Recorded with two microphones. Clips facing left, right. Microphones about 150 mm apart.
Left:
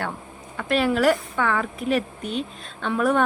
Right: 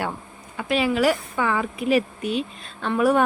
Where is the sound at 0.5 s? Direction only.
Centre (ahead or behind).